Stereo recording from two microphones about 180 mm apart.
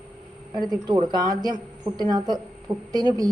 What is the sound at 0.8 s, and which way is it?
Speech, 25° right (ahead or behind).